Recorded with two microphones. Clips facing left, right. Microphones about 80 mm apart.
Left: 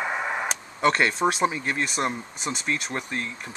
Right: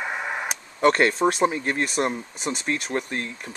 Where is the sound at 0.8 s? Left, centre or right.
Right.